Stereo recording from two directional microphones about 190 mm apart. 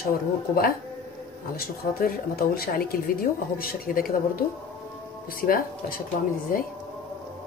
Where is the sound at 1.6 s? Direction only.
50° left (ahead or behind).